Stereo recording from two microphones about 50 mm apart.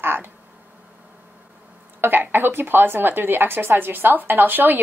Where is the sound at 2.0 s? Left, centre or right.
Right.